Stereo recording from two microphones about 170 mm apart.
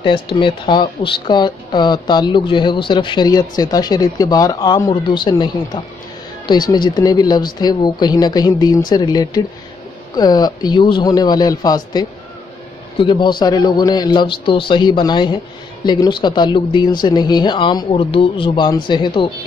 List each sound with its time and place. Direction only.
0.0 s speech: 30° left (ahead or behind)